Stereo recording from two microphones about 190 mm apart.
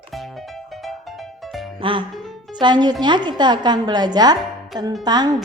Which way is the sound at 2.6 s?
20° right (ahead or behind).